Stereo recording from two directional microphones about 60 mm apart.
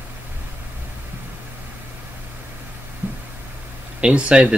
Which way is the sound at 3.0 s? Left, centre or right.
Right.